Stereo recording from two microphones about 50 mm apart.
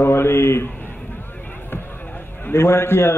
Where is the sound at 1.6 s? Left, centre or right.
Left.